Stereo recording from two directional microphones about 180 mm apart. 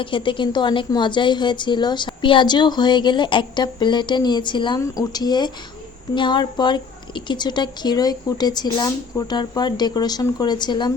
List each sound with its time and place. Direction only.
0.0 s a woman's voice: 30° left (ahead or behind)